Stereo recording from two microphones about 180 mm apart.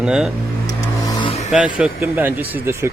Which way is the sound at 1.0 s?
25° left (ahead or behind).